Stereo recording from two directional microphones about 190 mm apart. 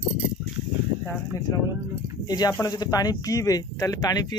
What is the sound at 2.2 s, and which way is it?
Speech, 20° left (ahead or behind).